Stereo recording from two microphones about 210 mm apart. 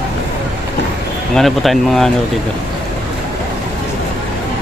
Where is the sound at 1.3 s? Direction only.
Centre (ahead or behind).